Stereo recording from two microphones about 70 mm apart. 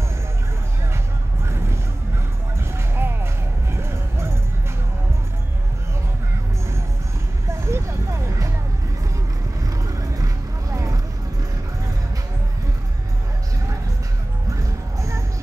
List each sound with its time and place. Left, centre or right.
2.6 s music: right
7.4 s a sound: right
9.6 s vehicle: right
14.5 s music: right